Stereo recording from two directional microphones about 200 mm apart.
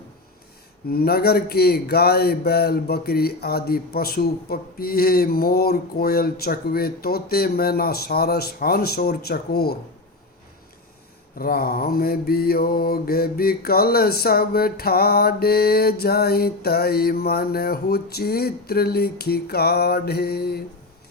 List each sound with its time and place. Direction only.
0.9 s mantra: 50° left (ahead or behind)
11.3 s mantra: 45° left (ahead or behind)